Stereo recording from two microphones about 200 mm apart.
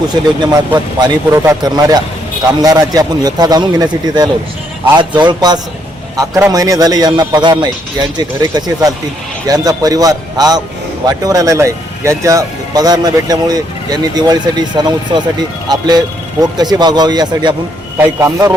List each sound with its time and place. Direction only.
0.1 s a man's voice: 20° right (ahead or behind)